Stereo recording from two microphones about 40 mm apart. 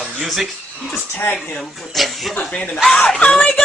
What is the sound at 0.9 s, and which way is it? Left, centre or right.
Speech, left.